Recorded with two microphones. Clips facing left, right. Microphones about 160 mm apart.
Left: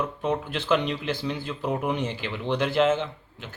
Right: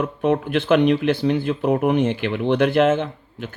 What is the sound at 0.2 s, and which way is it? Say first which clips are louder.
Speech: right 8 dB; 65° right (ahead or behind).